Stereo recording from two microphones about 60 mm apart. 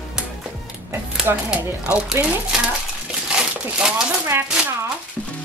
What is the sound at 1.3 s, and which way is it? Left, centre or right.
Speech, right.